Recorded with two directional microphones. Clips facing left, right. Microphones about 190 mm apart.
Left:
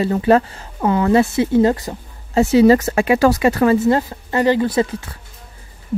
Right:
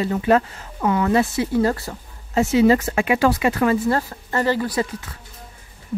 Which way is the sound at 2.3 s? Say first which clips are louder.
Left 4 dB; 35° left (ahead or behind).